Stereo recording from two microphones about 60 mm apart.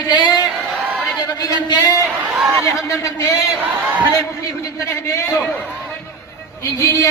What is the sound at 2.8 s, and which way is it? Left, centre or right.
Speech, left.